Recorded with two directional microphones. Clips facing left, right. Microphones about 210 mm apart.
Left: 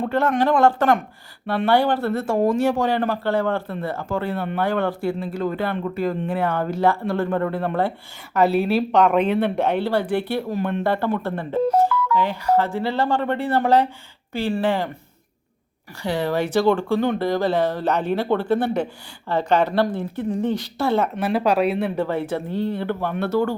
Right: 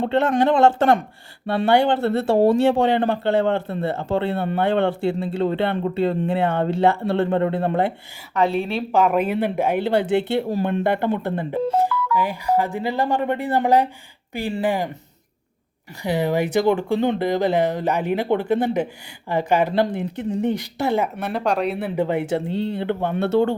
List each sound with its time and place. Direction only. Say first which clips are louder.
0.0 s speech: right 2 dB; 25° right (ahead or behind)
8.4 s speech: left 3 dB; 5° left (ahead or behind); by 14.8 s 15° right (ahead or behind)
16.0 s speech: right 1 dB; 15° right (ahead or behind)
21.2 s speech: left 3 dB; 5° left (ahead or behind)
21.9 s speech: right 2 dB; 20° right (ahead or behind)